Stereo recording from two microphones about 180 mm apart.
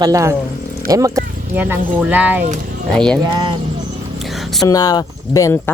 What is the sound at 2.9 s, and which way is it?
Speech, 5° left (ahead or behind).